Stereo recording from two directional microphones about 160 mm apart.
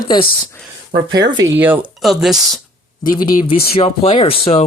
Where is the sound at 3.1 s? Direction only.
25° left (ahead or behind).